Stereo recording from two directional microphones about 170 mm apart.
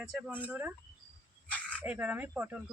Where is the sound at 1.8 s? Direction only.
5° right (ahead or behind).